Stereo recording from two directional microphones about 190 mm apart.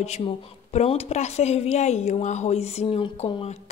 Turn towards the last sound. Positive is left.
turn(degrees=30)  # may be behind; listen again after turning